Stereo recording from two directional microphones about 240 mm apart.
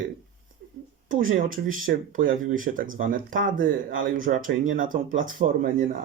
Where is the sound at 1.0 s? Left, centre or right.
Right.